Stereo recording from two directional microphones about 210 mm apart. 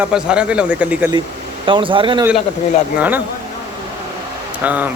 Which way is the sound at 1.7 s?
25° right (ahead or behind).